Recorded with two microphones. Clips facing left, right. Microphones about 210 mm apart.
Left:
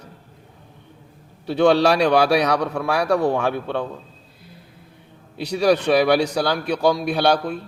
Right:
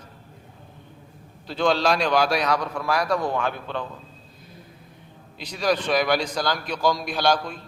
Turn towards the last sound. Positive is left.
turn(degrees=60)  # may be behind; listen again after turning